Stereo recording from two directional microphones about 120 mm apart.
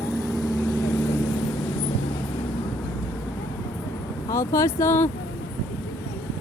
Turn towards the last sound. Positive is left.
turn(degrees=20)  # may be behind; listen again after turning